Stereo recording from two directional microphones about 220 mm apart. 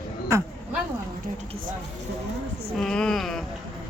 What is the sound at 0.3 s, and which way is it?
Speech, 15° right (ahead or behind).